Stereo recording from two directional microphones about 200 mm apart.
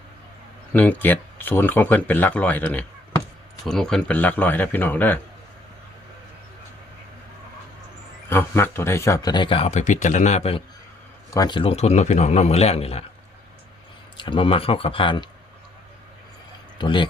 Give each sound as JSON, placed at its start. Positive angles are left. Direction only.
{"t": 0.7, "sound": "speech", "side_deg": 10}
{"t": 8.3, "sound": "a man's voice", "side_deg": 10}
{"t": 14.2, "sound": "speech", "side_deg": 25}
{"t": 16.7, "sound": "a man's voice", "side_deg": 25}